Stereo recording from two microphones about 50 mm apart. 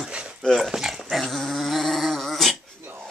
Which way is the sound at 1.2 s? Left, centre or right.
Centre.